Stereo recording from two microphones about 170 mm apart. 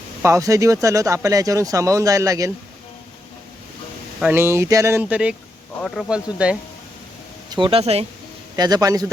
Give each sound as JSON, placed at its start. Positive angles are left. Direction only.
{"t": 0.2, "sound": "speech", "side_deg": -15}
{"t": 4.2, "sound": "speech", "side_deg": -10}
{"t": 7.5, "sound": "speech", "side_deg": -30}
{"t": 8.5, "sound": "speech", "side_deg": -25}